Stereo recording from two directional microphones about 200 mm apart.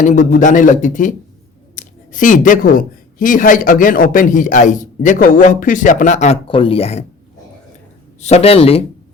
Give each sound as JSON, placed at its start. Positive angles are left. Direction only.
{"t": 0.0, "sound": "speech", "side_deg": 40}
{"t": 8.2, "sound": "speech", "side_deg": 30}